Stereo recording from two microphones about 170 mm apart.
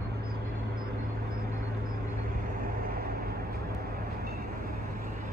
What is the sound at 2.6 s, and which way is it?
Vehicle, 60° right (ahead or behind).